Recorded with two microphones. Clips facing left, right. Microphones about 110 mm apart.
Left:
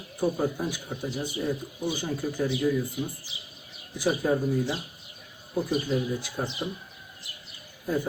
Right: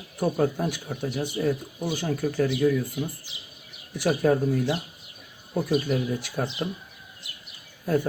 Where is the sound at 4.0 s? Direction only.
70° right (ahead or behind).